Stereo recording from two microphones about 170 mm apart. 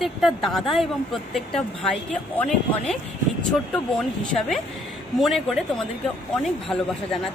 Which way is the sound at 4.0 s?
Centre (ahead or behind).